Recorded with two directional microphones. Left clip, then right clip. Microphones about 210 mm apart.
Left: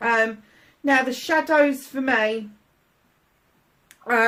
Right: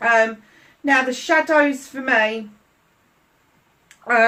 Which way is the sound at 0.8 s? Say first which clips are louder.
Right 2 dB; 40° left (ahead or behind).